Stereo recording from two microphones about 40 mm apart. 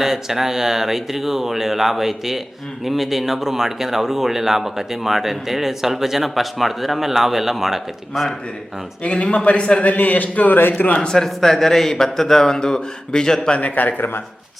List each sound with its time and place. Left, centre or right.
0.0 s speech: centre
9.0 s a man's voice: left
9.8 s speech: left
10.9 s a man's voice: left
11.2 s speech: centre
13.5 s speech: left